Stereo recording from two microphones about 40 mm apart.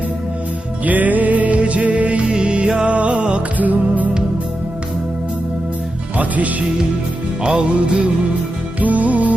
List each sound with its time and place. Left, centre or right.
0.9 s music: right
2.3 s music: right
3.6 s music: right
6.1 s speech: right
7.4 s music: right
8.8 s music: right